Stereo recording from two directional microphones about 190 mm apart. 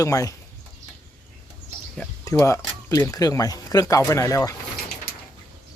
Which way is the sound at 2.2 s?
15° left (ahead or behind).